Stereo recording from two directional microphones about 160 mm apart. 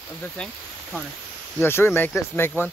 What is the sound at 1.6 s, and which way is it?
Speech, 15° left (ahead or behind).